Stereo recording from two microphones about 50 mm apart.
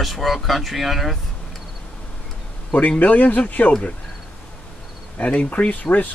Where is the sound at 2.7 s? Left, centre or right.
Left.